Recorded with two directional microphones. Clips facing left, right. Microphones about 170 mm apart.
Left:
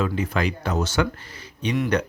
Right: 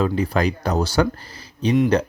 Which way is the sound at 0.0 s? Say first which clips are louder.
Right 4 dB; 35° right (ahead or behind).